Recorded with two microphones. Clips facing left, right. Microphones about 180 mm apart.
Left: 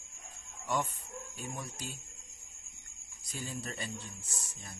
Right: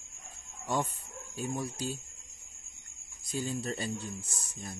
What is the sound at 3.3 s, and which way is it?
Speech, 30° right (ahead or behind).